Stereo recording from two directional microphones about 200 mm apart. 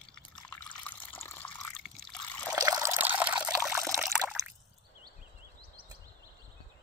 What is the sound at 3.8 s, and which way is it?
Water, centre (ahead or behind).